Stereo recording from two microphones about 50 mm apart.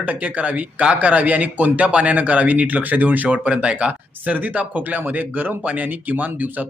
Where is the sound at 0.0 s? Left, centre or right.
Right.